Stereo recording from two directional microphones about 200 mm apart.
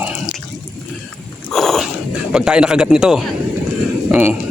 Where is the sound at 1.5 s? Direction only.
Centre (ahead or behind).